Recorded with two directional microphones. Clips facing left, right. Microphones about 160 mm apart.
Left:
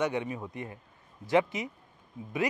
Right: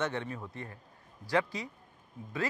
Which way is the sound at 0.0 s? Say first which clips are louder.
Left 4 dB; 15° left (ahead or behind).